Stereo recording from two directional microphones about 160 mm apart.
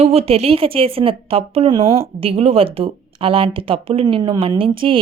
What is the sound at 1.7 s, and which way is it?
Speech, 20° right (ahead or behind).